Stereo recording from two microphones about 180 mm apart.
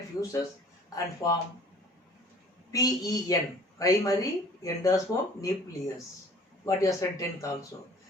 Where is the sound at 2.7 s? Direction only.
20° left (ahead or behind).